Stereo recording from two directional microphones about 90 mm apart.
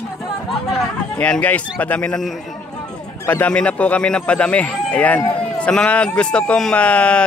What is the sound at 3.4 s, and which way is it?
A man's voice, 10° left (ahead or behind).